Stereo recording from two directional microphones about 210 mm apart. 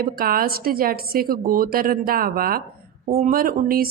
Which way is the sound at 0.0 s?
45° right (ahead or behind).